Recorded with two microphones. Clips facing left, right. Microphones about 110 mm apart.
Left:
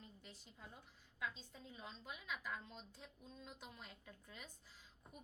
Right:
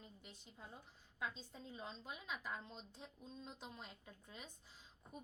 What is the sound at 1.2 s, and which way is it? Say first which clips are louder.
A woman's voice: right 1 dB; 30° right (ahead or behind).